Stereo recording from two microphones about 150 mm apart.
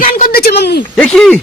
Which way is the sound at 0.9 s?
5° left (ahead or behind).